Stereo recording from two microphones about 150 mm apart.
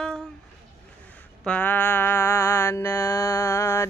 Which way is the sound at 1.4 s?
10° left (ahead or behind).